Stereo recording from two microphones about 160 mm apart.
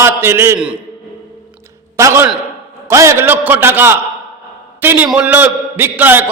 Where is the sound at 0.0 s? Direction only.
15° right (ahead or behind).